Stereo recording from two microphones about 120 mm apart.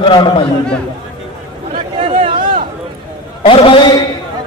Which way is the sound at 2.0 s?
70° right (ahead or behind).